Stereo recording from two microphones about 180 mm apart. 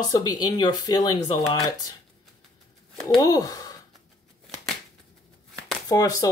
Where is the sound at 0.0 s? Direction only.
20° left (ahead or behind).